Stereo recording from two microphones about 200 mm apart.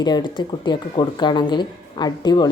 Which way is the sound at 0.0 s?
20° left (ahead or behind).